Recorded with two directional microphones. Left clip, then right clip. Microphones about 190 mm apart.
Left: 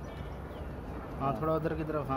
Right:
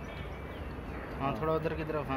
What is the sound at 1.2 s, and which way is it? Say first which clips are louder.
Speech: left 1 dB; 65° left (ahead or behind).